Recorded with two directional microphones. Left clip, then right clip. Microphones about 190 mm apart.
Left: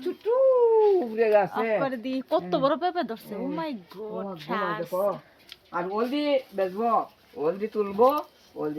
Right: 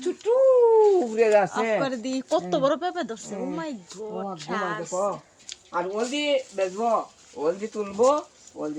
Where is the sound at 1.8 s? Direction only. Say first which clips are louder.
Right 1 dB; 15° right (ahead or behind).